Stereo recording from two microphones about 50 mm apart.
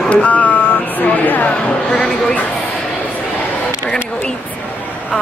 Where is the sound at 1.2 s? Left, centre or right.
Left.